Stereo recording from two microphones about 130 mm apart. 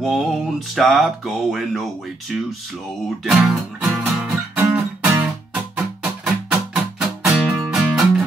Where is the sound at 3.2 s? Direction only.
5° right (ahead or behind).